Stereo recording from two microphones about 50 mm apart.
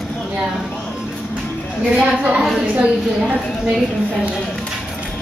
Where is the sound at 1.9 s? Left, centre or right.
Right.